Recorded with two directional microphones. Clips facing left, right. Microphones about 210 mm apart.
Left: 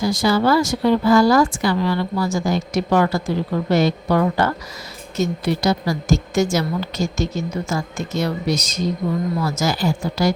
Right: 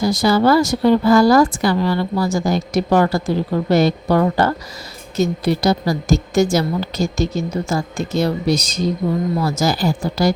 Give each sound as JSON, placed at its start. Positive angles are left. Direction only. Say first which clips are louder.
{"t": 0.0, "sound": "speech", "louder": "right 3 dB", "side_deg": -40}